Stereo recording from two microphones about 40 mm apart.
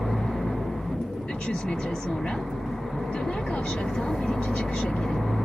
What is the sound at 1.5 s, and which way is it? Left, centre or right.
Speech, centre.